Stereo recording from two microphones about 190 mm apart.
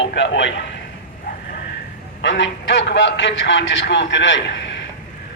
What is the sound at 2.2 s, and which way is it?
A man's voice, 70° left (ahead or behind).